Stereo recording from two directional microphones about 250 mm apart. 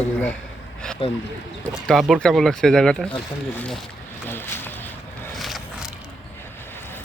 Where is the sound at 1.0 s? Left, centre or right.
Centre.